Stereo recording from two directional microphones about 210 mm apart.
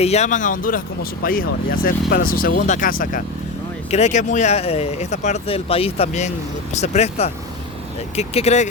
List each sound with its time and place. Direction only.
0.0 s speech: 30° left (ahead or behind)